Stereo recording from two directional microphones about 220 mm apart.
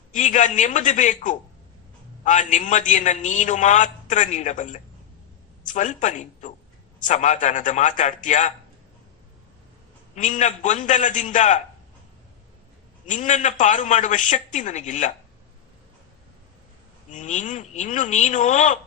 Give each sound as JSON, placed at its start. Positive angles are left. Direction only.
{"t": 0.1, "sound": "a man's voice", "side_deg": 35}
{"t": 10.2, "sound": "a man's voice", "side_deg": 35}
{"t": 13.1, "sound": "a man's voice", "side_deg": 35}
{"t": 17.1, "sound": "a man's voice", "side_deg": 35}